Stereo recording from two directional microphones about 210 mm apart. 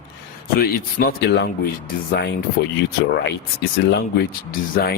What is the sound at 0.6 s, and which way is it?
Speech, 45° left (ahead or behind).